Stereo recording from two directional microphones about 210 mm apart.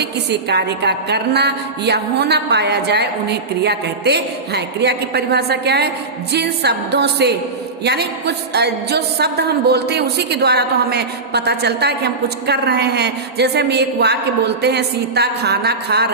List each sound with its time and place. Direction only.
0.0 s a woman's voice: 55° right (ahead or behind)